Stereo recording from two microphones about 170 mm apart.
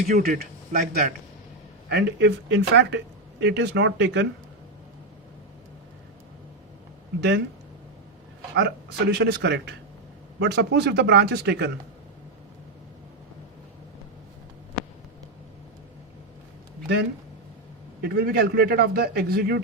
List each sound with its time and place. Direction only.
0.2 s speech: 60° right (ahead or behind)
1.9 s speech: 75° right (ahead or behind); by 4.3 s 90° right
7.2 s speech: 90° right
8.5 s speech: 80° right
18.0 s a man's voice: 65° right (ahead or behind)